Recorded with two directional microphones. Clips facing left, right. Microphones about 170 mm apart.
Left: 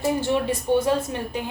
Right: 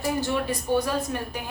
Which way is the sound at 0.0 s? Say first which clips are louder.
Left 4 dB; 25° left (ahead or behind).